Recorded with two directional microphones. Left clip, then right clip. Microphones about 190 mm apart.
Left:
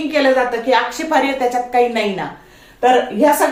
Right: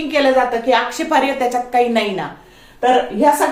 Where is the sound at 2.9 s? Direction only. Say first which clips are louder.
Right 1 dB; 10° right (ahead or behind).